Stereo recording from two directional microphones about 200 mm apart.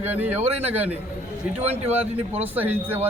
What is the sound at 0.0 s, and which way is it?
Speech, 10° right (ahead or behind).